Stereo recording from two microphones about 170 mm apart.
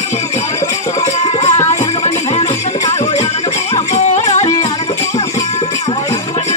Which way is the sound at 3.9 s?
40° left (ahead or behind).